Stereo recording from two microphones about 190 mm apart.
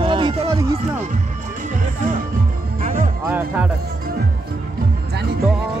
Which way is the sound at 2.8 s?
35° right (ahead or behind).